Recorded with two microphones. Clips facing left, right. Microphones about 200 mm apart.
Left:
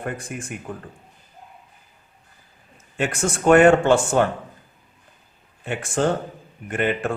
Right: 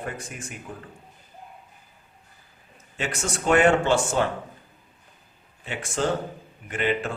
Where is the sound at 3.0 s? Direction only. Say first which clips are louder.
Left 6 dB; 55° left (ahead or behind).